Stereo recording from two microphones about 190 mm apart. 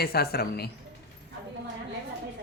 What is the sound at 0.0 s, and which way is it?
Speech, 55° left (ahead or behind).